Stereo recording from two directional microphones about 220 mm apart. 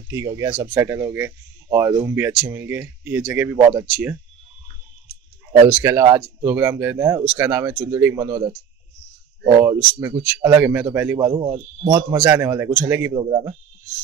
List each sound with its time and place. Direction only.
0.1 s speech: 15° right (ahead or behind)
3.5 s speech: 15° right (ahead or behind)
5.7 s speech: 10° right (ahead or behind)
9.9 s speech: 15° right (ahead or behind)